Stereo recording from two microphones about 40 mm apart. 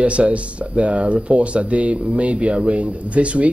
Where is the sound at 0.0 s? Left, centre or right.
Right.